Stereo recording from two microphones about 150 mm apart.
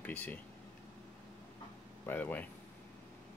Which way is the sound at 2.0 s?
10° left (ahead or behind).